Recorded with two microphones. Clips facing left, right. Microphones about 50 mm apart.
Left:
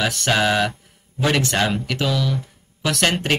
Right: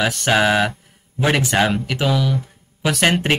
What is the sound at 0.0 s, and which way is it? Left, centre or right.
Speech, centre.